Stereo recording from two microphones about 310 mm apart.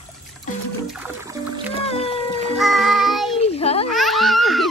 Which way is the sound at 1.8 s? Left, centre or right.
Centre.